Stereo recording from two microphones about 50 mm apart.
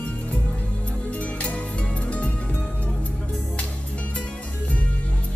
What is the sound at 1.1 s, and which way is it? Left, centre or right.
Music, left.